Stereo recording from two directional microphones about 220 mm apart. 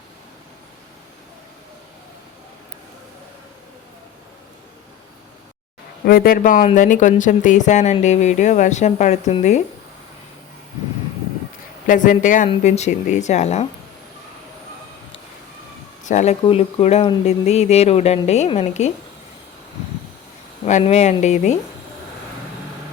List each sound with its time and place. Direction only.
6.1 s speech: 40° left (ahead or behind)
11.9 s speech: 35° left (ahead or behind)
16.0 s speech: 30° left (ahead or behind)
20.7 s speech: 30° left (ahead or behind)